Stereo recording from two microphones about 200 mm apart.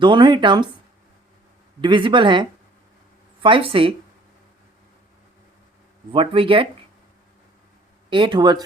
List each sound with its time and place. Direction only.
0.0 s speech: 25° right (ahead or behind)
1.8 s speech: 25° right (ahead or behind)
6.1 s speech: 25° right (ahead or behind)
8.1 s speech: 25° right (ahead or behind)